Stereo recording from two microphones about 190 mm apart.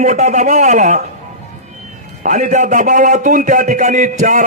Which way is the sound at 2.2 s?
40° right (ahead or behind).